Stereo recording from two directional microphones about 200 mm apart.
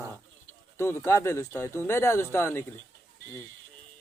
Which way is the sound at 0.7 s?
15° left (ahead or behind).